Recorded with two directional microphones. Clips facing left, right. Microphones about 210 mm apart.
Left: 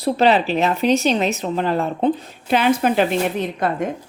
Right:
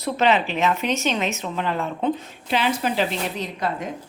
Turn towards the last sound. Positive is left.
turn(degrees=55)  # may be behind; listen again after turning